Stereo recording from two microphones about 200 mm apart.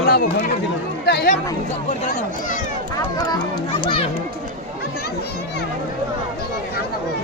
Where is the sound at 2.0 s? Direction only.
35° left (ahead or behind).